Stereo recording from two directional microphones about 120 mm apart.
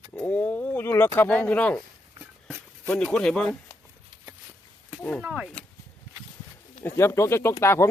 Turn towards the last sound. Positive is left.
turn(degrees=20)  # may be behind; listen again after turning